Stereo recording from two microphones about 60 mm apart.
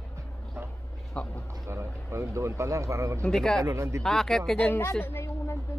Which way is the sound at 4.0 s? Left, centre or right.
Centre.